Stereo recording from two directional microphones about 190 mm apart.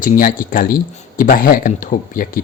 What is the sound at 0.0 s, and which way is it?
Speech, 45° left (ahead or behind).